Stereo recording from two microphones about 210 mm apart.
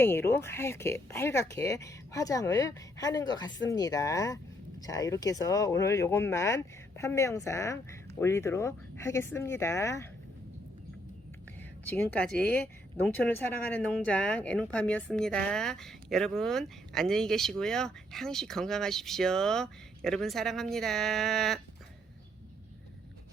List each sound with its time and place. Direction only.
0.0 s speech: 10° left (ahead or behind)
11.9 s speech: 5° left (ahead or behind)